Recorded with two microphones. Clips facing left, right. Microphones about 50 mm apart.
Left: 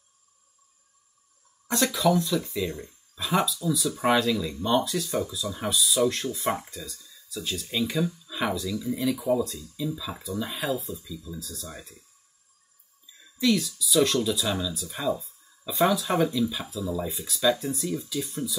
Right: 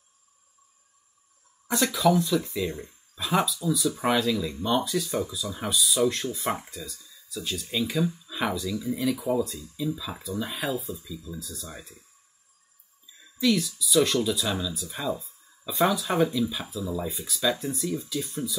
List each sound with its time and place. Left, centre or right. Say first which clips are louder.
1.7 s speech: right 1 dB; centre
13.2 s speech: even; centre
15.0 s speech: left 3 dB; right
15.6 s speech: left 1 dB; centre